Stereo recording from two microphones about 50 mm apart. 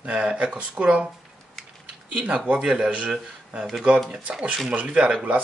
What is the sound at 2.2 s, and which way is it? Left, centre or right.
Speech, right.